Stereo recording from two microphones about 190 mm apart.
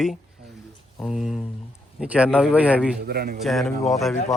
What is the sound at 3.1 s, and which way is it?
Speech, 55° right (ahead or behind).